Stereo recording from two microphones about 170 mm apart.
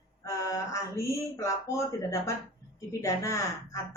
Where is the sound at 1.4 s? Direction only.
15° left (ahead or behind).